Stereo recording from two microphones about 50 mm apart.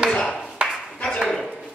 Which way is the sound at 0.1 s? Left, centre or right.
Centre.